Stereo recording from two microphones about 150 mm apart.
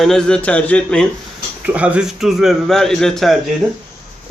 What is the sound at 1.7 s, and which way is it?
Speech, 10° right (ahead or behind).